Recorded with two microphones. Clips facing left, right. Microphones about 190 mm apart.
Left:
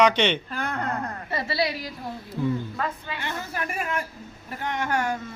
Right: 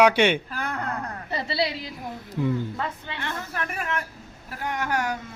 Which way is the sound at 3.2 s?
10° left (ahead or behind).